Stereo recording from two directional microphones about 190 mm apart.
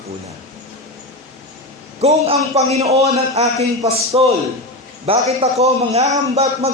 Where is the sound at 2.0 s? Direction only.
35° right (ahead or behind).